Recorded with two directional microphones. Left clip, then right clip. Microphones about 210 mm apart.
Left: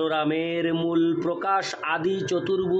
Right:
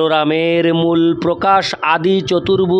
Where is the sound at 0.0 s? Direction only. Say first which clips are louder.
Right 11 dB; 55° right (ahead or behind).